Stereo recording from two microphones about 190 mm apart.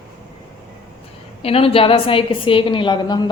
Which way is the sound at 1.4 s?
30° left (ahead or behind).